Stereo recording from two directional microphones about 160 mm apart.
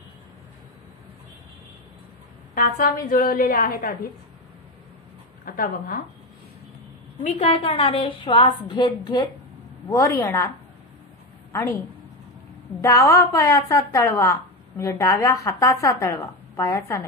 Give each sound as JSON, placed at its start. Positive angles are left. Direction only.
{"t": 2.5, "sound": "a woman's voice", "side_deg": 65}
{"t": 5.4, "sound": "a woman's voice", "side_deg": 60}
{"t": 7.3, "sound": "a woman's voice", "side_deg": 35}
{"t": 11.5, "sound": "a woman's voice", "side_deg": 20}
{"t": 12.8, "sound": "a woman's voice", "side_deg": 20}